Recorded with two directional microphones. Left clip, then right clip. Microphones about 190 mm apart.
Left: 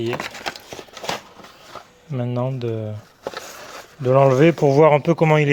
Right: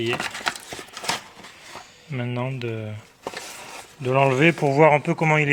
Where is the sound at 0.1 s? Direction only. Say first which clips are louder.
Even; 35° left (ahead or behind).